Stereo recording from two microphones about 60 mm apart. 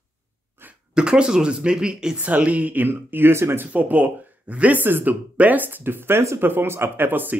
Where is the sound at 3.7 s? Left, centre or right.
Right.